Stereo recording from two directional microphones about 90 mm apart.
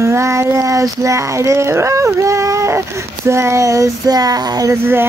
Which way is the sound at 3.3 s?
30° right (ahead or behind).